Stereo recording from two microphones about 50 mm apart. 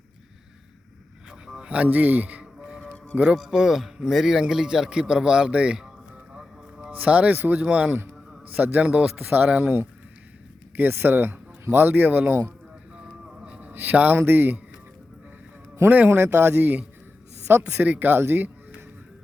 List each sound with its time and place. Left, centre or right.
1.5 s a sound: centre
1.7 s speech: right
2.4 s music: centre
3.1 s speech: right
3.5 s a man's voice: centre
6.3 s music: centre
6.9 s a man's voice: right
7.6 s a man's voice: right
10.8 s speech: right
13.2 s a sound: centre
13.6 s a man's voice: right
15.9 s speech: right
17.5 s speech: right
17.8 s speech: right